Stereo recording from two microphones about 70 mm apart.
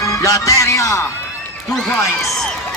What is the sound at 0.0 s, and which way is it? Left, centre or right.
Speech, left.